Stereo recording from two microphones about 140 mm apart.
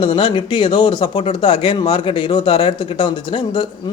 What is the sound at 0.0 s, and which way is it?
Speech, 35° left (ahead or behind).